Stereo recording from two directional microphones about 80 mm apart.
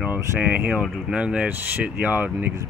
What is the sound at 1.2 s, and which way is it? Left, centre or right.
Speech, centre.